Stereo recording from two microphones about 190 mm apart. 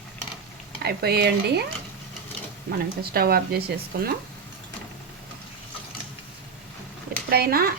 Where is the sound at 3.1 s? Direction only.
55° right (ahead or behind).